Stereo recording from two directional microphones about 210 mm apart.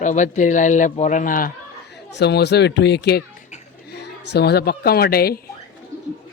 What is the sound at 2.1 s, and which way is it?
Speech, 55° left (ahead or behind).